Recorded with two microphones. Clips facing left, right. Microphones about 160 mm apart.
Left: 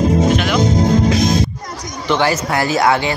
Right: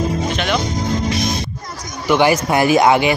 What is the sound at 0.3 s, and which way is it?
Music, 5° left (ahead or behind).